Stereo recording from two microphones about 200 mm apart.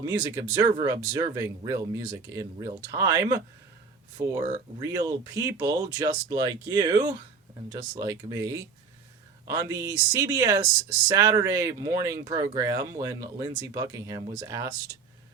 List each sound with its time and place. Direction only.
0.0 s speech: 15° right (ahead or behind)